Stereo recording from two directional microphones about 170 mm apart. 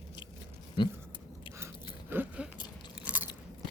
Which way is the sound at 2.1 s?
10° right (ahead or behind).